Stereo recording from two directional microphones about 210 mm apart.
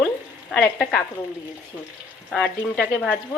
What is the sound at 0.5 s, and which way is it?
Speech, 5° left (ahead or behind).